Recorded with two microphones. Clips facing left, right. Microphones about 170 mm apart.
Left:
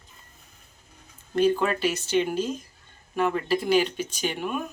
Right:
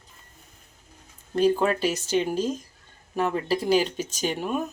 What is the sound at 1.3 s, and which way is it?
Speech, 35° right (ahead or behind).